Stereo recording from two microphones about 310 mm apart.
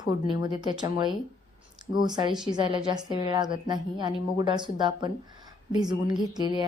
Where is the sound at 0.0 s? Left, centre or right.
Centre.